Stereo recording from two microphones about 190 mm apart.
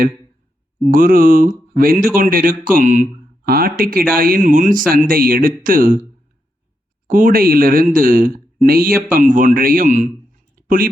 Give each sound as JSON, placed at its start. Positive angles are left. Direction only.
{"t": 0.8, "sound": "speech", "side_deg": -45}
{"t": 7.1, "sound": "speech", "side_deg": -45}